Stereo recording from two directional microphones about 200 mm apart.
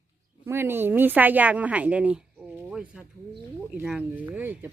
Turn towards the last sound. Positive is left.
turn(degrees=-10)  # may be behind; listen again after turning